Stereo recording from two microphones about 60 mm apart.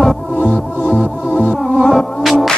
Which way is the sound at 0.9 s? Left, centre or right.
Left.